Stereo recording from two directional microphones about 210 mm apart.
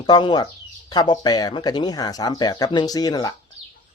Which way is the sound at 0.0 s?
20° left (ahead or behind).